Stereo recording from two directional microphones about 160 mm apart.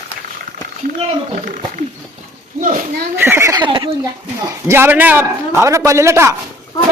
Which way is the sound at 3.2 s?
15° right (ahead or behind).